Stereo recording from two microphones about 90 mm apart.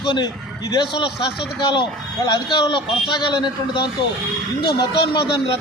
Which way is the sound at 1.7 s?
55° left (ahead or behind).